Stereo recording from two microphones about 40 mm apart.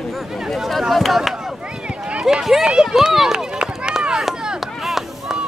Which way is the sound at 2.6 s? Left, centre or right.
Centre.